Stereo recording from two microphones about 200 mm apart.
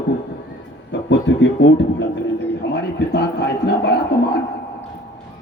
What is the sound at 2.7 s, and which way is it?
Speech, 60° left (ahead or behind).